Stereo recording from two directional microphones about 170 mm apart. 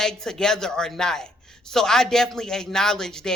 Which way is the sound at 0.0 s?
5° left (ahead or behind).